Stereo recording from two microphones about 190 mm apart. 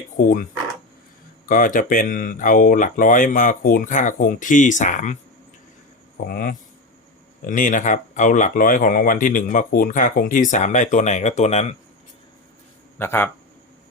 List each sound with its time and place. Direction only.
0.2 s speech: 45° left (ahead or behind)
1.5 s speech: 45° left (ahead or behind)
6.1 s speech: 50° left (ahead or behind)
13.0 s speech: 10° left (ahead or behind)